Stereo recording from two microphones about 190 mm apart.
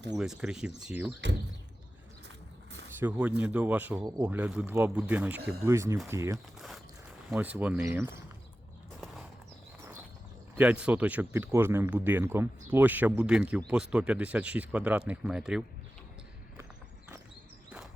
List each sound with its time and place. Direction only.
0.2 s speech: 5° right (ahead or behind)
3.0 s speech: 5° right (ahead or behind)
10.6 s speech: 5° right (ahead or behind)